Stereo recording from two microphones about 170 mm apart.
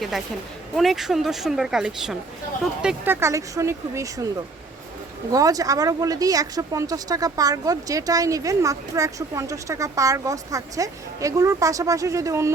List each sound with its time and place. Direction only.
0.8 s speech: centre (ahead or behind); by 4.3 s 20° right (ahead or behind)
5.3 s speech: 20° right (ahead or behind)